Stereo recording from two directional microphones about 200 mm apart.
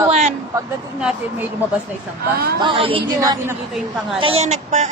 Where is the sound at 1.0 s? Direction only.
5° right (ahead or behind).